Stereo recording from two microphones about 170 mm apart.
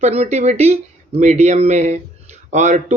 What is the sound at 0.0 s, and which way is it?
Speech, 40° right (ahead or behind).